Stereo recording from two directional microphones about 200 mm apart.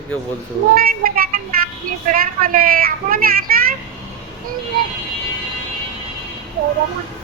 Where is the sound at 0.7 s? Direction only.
45° right (ahead or behind).